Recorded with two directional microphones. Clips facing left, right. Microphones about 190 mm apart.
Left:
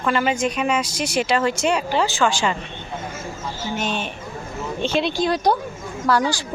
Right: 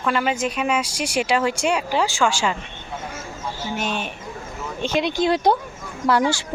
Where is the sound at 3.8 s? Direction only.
10° right (ahead or behind).